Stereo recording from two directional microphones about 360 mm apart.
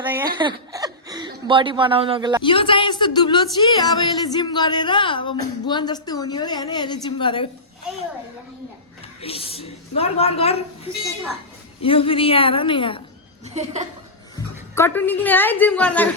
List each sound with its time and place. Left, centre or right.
0.0 s a woman's voice: centre
2.4 s speech: centre
9.2 s speech: centre
11.8 s speech: centre
13.4 s speech: centre
14.8 s a woman's voice: centre